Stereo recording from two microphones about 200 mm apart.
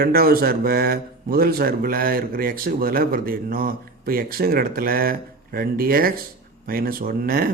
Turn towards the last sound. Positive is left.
turn(degrees=-45)  # may be behind; listen again after turning